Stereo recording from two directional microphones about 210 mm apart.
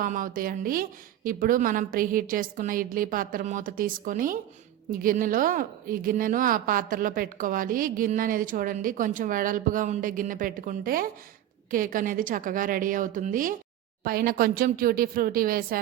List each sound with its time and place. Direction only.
0.0 s a woman's voice: 40° right (ahead or behind)